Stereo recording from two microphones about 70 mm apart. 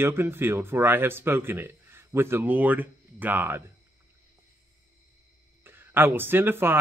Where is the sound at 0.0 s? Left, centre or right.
Right.